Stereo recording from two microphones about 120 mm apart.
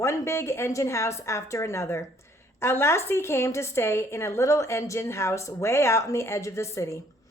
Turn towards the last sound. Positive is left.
turn(degrees=25)  # may be behind; listen again after turning